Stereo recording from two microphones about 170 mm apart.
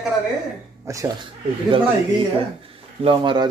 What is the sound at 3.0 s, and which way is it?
Speech, 25° right (ahead or behind).